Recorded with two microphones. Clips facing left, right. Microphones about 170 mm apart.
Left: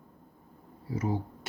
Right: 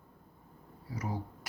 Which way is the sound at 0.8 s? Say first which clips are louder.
Left 7 dB; 25° left (ahead or behind).